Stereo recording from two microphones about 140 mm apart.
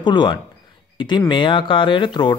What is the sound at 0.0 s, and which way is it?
Speech, 35° left (ahead or behind).